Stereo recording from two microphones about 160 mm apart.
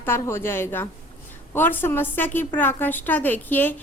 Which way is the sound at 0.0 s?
15° left (ahead or behind).